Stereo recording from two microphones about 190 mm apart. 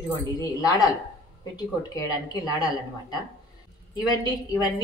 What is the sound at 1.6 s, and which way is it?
A woman's voice, 20° left (ahead or behind).